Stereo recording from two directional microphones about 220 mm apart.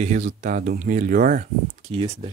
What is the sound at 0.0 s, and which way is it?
Speech, 35° right (ahead or behind).